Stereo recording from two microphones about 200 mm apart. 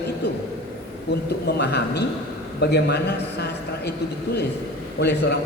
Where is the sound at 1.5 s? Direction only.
55° left (ahead or behind).